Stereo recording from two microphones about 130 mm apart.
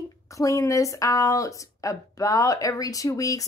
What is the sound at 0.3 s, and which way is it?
Speech, 25° left (ahead or behind).